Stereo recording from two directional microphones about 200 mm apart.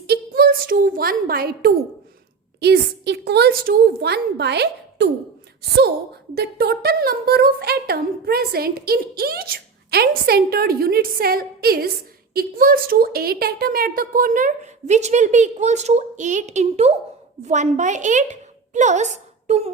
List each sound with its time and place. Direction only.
0.1 s a woman's voice: 50° right (ahead or behind)
6.3 s a woman's voice: 50° right (ahead or behind); by 19.7 s 35° right (ahead or behind)